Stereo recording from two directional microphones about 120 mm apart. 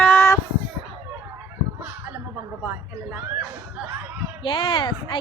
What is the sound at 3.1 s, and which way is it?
Speech, 10° right (ahead or behind).